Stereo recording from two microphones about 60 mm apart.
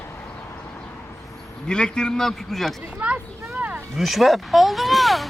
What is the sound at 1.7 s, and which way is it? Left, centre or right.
A man's voice, centre.